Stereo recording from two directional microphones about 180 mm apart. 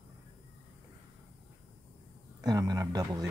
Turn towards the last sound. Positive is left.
turn(degrees=-20)  # may be behind; listen again after turning